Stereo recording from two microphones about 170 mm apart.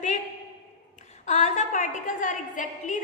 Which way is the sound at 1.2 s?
45° left (ahead or behind).